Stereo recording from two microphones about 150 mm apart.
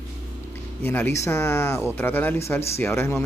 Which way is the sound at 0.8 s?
15° left (ahead or behind).